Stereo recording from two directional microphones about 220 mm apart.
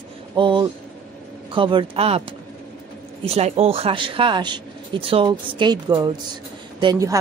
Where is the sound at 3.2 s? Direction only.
30° right (ahead or behind).